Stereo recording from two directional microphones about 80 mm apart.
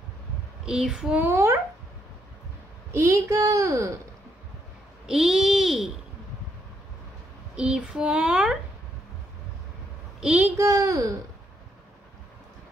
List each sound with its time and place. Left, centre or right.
0.7 s a child's voice: centre
1.2 s a woman's voice: right
2.9 s a woman's voice: right
5.0 s a child's voice: centre
7.5 s a child's voice: centre
10.2 s a child's voice: centre
10.6 s a child's voice: right